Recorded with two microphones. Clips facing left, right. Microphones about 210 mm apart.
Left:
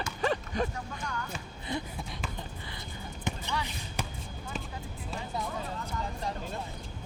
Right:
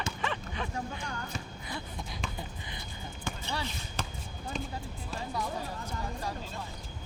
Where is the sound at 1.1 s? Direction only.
40° right (ahead or behind).